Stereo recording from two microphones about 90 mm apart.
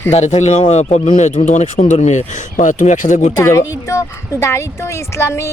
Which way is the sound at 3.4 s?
30° left (ahead or behind).